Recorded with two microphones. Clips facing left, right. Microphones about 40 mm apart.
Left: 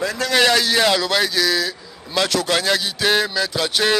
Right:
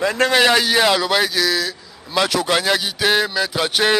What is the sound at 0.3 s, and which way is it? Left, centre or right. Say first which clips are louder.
A man's voice: left 1 dB; centre.